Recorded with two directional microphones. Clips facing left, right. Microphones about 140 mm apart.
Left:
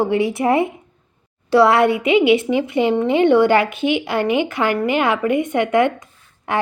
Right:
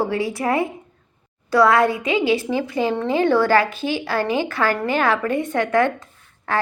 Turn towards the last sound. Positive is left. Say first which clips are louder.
# left 2 dB
turn(degrees=20)  # may be behind; listen again after turning